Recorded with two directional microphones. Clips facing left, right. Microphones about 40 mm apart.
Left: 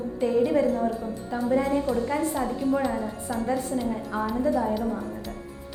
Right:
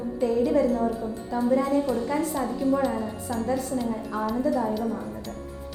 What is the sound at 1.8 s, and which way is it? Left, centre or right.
A woman's voice, centre.